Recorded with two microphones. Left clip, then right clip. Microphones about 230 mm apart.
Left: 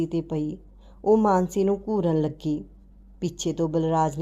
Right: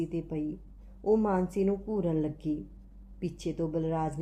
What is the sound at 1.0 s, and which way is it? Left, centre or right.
Speech, left.